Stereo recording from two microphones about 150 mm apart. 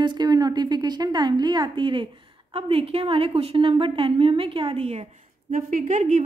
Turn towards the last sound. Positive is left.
turn(degrees=-55)  # may be behind; listen again after turning